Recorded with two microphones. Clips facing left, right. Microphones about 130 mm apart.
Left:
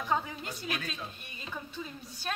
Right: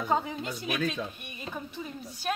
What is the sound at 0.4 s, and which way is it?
Speech, 85° right.